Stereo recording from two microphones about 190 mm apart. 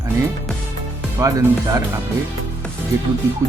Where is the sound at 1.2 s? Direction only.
15° right (ahead or behind).